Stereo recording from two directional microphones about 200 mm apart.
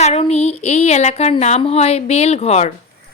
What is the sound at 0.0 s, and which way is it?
Speech, 30° left (ahead or behind).